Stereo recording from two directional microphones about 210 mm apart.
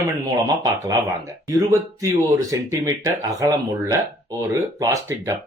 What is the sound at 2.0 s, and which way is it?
Speech, 15° right (ahead or behind).